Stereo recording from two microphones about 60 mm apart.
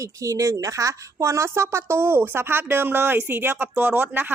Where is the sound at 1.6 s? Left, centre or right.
Right.